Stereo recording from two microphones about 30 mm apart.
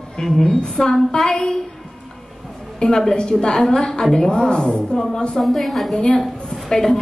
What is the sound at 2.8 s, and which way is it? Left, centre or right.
A woman's voice, left.